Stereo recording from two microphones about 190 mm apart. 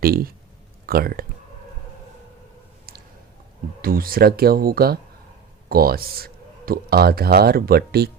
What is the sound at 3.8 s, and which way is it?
Speech, 50° right (ahead or behind).